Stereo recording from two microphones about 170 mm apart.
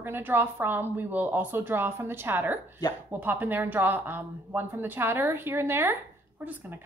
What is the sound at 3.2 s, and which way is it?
A woman's voice, 10° right (ahead or behind).